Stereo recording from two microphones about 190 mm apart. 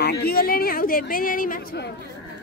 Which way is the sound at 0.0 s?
55° left (ahead or behind).